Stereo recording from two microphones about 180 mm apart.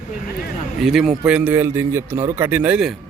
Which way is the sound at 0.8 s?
Centre (ahead or behind).